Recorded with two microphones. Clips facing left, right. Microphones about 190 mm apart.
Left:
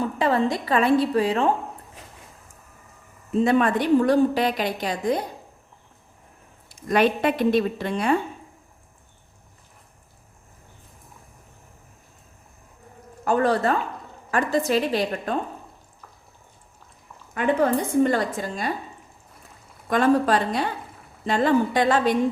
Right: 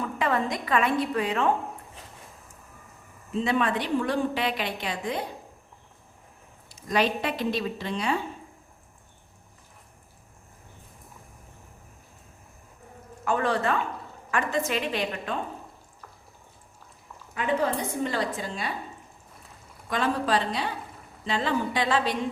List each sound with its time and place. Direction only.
0.0 s a woman's voice: 30° left (ahead or behind)
3.3 s a woman's voice: 50° left (ahead or behind)
6.7 s speech: 55° left (ahead or behind)
13.2 s a woman's voice: 40° left (ahead or behind)
17.3 s speech: 50° left (ahead or behind)
19.9 s speech: 50° left (ahead or behind)